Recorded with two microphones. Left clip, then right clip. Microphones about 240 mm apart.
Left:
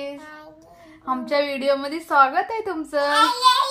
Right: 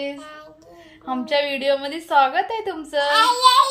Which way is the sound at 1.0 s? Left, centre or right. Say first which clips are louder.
Right 1 dB; left.